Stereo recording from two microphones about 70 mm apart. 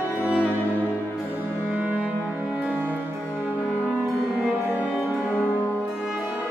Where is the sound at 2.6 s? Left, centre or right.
Right.